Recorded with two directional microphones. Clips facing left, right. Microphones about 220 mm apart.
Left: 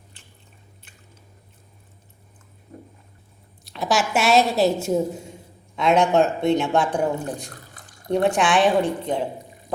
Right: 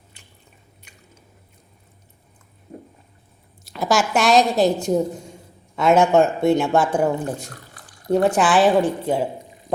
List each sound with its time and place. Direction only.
3.7 s a woman's voice: centre (ahead or behind)
7.8 s a sound: 25° left (ahead or behind)
8.1 s a woman's voice: centre (ahead or behind)